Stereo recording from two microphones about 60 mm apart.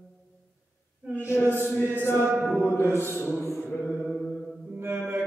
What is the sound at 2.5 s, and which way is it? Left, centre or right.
Mantra, left.